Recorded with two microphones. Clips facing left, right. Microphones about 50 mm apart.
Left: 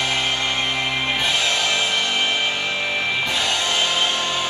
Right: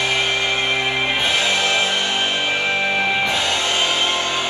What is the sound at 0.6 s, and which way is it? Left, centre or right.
Music, centre.